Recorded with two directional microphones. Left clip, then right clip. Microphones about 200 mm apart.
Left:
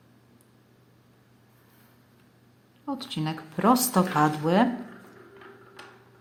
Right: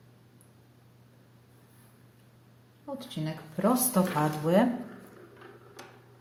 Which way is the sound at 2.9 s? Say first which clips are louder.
Left 5 dB; 15° left (ahead or behind).